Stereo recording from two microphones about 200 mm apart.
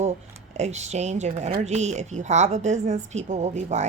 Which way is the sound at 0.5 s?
35° right (ahead or behind).